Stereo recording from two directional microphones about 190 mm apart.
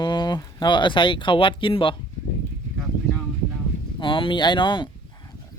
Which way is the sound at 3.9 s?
25° left (ahead or behind).